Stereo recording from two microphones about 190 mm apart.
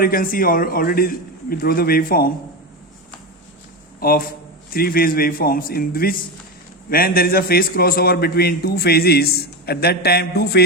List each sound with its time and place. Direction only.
0.0 s a man's voice: 45° left (ahead or behind)
4.0 s a man's voice: 50° left (ahead or behind)